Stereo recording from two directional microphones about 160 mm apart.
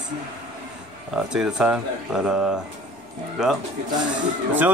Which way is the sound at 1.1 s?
5° right (ahead or behind).